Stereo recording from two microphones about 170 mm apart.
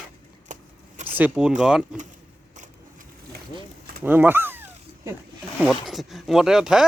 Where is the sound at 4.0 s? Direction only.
10° right (ahead or behind).